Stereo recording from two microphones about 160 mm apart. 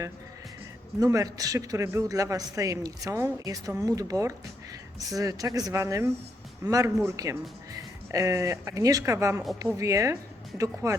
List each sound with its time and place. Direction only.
0.9 s speech: 20° right (ahead or behind)